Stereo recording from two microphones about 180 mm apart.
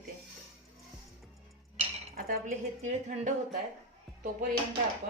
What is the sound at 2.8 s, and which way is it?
Speech, 40° right (ahead or behind).